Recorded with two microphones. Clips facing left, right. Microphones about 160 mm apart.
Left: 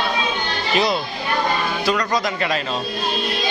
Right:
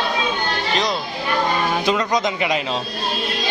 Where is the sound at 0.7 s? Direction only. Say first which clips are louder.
Left 4 dB; 5° left (ahead or behind).